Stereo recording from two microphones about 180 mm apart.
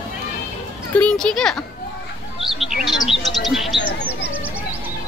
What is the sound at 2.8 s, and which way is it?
Bird, centre (ahead or behind).